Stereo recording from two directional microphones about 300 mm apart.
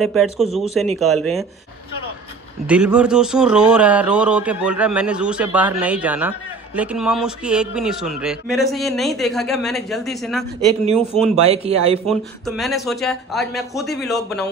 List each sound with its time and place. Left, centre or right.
0.0 s a man's voice: centre
2.6 s a man's voice: centre
11.4 s speech: centre
12.1 s a man's voice: centre